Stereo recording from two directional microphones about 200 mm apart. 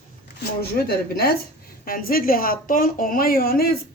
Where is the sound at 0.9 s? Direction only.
50° left (ahead or behind).